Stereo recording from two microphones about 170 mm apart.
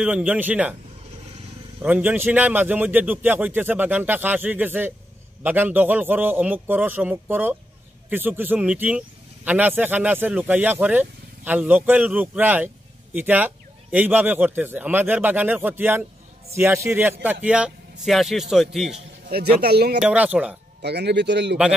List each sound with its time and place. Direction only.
0.0 s speech: 10° right (ahead or behind)
1.8 s a man's voice: 10° right (ahead or behind)
18.9 s a sound: 40° right (ahead or behind)
19.3 s speech: 70° right (ahead or behind)
20.0 s speech: 5° right (ahead or behind)
20.8 s speech: 80° right